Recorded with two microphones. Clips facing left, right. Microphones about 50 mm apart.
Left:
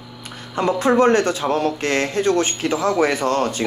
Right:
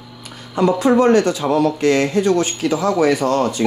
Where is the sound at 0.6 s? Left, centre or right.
Left.